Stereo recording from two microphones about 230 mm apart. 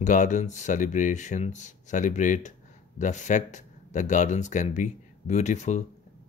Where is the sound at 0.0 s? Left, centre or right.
Left.